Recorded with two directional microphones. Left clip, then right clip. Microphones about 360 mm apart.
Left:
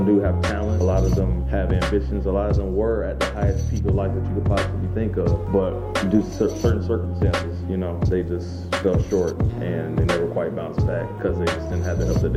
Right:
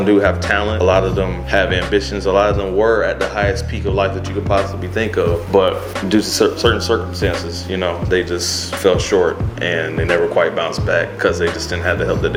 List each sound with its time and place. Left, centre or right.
0.0 s speech: centre
4.5 s speech: centre